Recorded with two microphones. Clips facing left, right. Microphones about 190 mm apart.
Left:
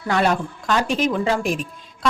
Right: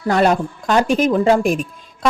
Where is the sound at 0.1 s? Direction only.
40° right (ahead or behind).